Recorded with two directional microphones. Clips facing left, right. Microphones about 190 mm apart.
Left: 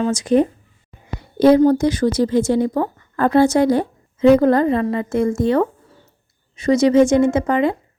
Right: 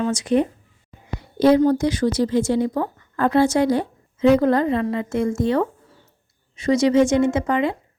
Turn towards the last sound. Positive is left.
turn(degrees=45)  # may be behind; listen again after turning